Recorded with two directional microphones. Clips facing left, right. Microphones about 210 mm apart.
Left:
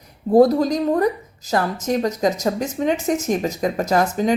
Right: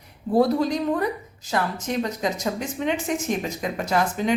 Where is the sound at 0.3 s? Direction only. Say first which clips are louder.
Left 6 dB; 40° left (ahead or behind).